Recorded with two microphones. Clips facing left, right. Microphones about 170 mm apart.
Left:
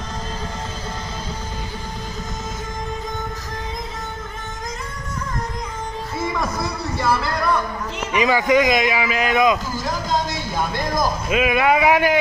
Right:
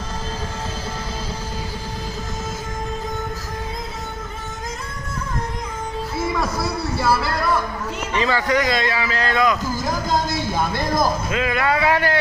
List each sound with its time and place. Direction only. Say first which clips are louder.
6.1 s music: right 1 dB; 5° right (ahead or behind)
8.1 s speech: left 3 dB; 15° left (ahead or behind)
9.8 s a sound: right 1 dB; 10° right (ahead or behind)
11.2 s speech: left 3 dB; 15° left (ahead or behind)